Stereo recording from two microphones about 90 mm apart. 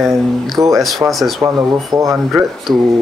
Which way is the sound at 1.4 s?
40° right (ahead or behind).